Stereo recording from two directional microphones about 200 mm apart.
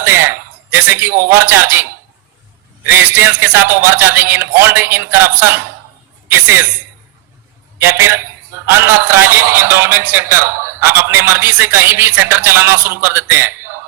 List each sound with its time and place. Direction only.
0.0 s speech: 10° right (ahead or behind)
3.3 s a man's voice: 10° right (ahead or behind)
7.8 s a man's voice: 10° right (ahead or behind)